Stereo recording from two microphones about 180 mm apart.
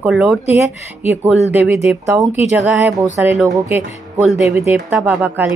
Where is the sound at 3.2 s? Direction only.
5° right (ahead or behind).